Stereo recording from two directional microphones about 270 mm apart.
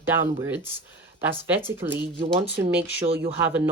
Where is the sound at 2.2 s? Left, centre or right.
Centre.